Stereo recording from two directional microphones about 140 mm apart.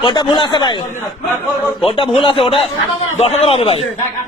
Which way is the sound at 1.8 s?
45° left (ahead or behind).